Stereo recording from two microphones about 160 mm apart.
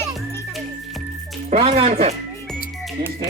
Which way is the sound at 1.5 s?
40° right (ahead or behind).